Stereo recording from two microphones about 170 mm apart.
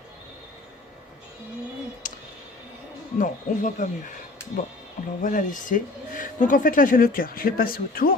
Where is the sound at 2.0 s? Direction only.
50° left (ahead or behind).